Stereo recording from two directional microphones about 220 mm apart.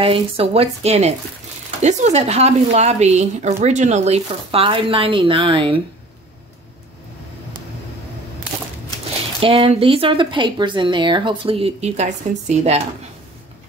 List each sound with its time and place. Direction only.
0.0 s a woman's voice: 25° right (ahead or behind)
9.4 s a woman's voice: 25° right (ahead or behind)